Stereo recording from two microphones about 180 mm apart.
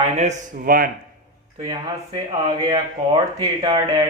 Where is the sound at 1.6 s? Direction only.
25° right (ahead or behind).